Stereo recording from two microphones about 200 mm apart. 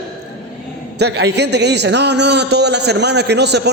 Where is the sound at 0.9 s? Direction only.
55° right (ahead or behind).